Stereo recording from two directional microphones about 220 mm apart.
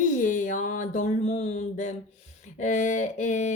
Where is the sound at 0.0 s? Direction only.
35° left (ahead or behind).